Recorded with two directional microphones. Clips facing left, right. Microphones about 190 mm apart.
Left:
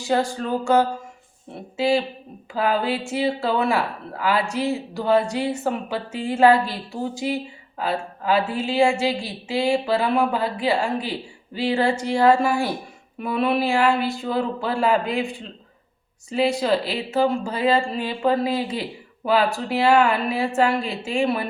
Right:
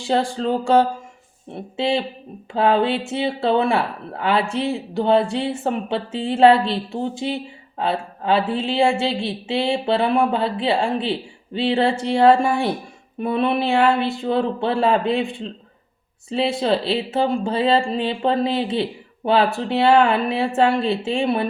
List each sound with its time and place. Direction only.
0.0 s speech: 25° right (ahead or behind)
16.3 s speech: 25° right (ahead or behind)